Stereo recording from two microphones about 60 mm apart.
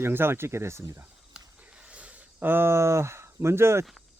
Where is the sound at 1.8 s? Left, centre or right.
Right.